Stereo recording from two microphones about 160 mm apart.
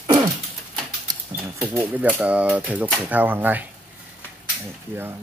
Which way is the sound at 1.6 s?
15° right (ahead or behind).